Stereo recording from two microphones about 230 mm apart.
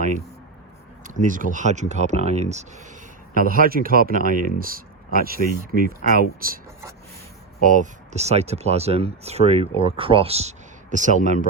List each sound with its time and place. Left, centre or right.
1.3 s speech: right
7.6 s speech: right